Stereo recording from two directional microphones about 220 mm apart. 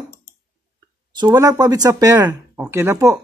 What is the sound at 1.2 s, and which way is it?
Speech, 15° right (ahead or behind).